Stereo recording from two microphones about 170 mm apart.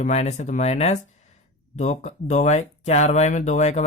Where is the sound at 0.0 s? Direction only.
40° left (ahead or behind).